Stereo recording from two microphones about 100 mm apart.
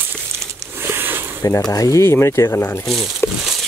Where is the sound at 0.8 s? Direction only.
25° right (ahead or behind).